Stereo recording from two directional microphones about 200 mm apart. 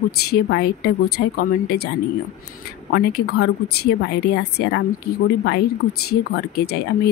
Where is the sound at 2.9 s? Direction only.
55° left (ahead or behind).